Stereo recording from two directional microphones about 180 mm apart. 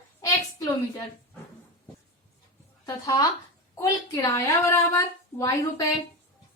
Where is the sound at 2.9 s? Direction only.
20° left (ahead or behind).